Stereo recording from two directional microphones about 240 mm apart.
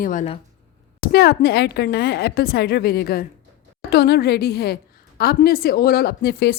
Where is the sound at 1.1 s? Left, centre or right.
Left.